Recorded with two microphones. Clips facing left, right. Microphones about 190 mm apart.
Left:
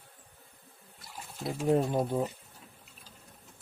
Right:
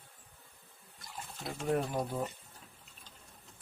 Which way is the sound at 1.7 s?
25° left (ahead or behind).